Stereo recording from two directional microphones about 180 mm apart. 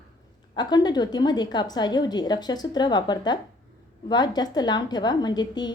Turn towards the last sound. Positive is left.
turn(degrees=25)  # may be behind; listen again after turning